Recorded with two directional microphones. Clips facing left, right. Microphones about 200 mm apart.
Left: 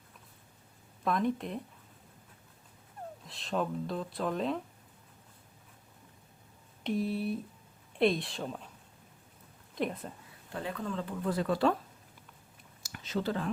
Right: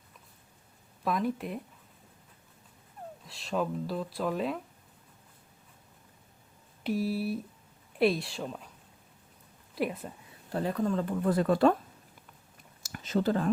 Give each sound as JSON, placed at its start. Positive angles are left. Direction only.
{"t": 1.0, "sound": "speech", "side_deg": -5}
{"t": 3.2, "sound": "speech", "side_deg": 0}
{"t": 6.8, "sound": "speech", "side_deg": -5}
{"t": 9.7, "sound": "speech", "side_deg": -5}
{"t": 10.5, "sound": "speech", "side_deg": -40}
{"t": 12.8, "sound": "a sound", "side_deg": -45}